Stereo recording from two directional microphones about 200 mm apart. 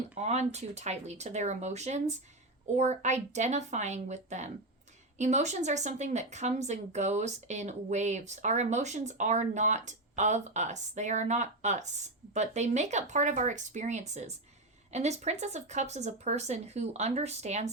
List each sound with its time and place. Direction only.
0.1 s a woman's voice: 35° right (ahead or behind)